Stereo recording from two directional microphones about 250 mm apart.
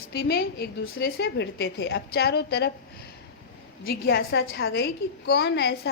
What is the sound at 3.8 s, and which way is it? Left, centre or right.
A woman's voice, left.